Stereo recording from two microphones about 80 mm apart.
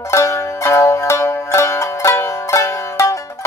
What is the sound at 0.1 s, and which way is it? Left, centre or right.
Zither, left.